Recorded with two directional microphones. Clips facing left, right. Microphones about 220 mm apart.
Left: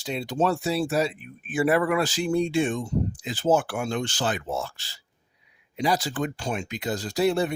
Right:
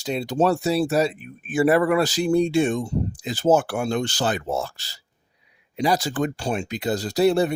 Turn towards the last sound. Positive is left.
turn(degrees=-35)  # may be behind; listen again after turning